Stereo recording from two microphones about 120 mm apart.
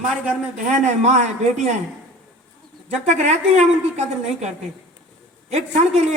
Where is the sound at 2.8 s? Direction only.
75° right (ahead or behind).